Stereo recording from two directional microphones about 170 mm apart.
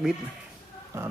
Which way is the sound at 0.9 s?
15° right (ahead or behind).